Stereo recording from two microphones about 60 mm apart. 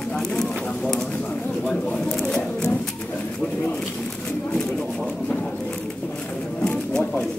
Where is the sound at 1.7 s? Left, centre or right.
Centre.